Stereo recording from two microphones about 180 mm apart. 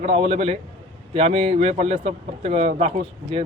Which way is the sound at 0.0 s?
35° right (ahead or behind).